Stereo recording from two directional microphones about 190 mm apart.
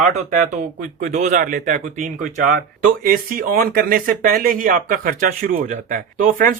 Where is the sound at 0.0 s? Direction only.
45° right (ahead or behind).